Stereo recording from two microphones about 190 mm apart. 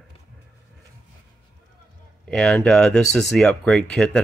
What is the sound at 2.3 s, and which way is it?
Speech, 5° left (ahead or behind).